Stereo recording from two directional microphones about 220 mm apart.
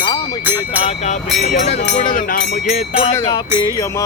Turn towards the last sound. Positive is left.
turn(degrees=25)  # may be behind; listen again after turning